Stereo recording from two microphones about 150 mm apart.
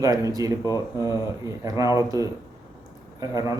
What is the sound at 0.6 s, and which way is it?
Speech, 25° left (ahead or behind).